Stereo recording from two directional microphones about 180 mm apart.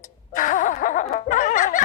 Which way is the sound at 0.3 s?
45° left (ahead or behind).